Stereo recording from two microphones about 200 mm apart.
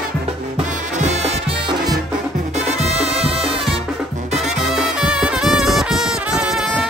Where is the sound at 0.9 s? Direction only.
35° right (ahead or behind).